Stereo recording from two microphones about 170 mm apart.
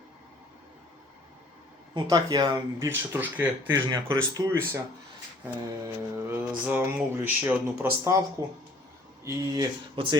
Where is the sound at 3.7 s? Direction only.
25° right (ahead or behind).